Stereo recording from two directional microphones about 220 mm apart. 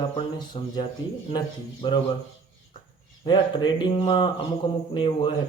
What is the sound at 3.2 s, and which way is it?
Speech, 20° left (ahead or behind).